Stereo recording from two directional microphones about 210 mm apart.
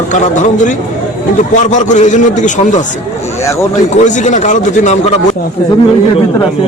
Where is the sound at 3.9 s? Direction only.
35° left (ahead or behind).